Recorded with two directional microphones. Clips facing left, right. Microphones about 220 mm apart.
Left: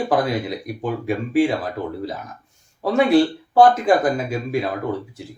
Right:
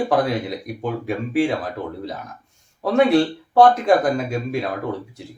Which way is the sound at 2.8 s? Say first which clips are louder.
Even; centre (ahead or behind).